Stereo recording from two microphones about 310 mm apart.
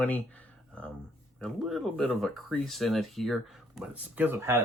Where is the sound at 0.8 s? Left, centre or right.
Centre.